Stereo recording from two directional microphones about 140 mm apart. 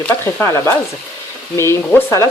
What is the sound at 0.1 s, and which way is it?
Frying, 20° left (ahead or behind).